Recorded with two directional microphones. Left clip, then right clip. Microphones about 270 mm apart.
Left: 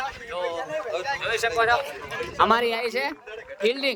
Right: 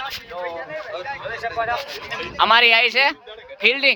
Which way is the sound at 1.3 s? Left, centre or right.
Centre.